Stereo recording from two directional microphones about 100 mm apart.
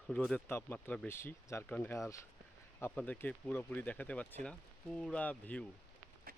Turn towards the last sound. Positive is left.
turn(degrees=15)  # may be behind; listen again after turning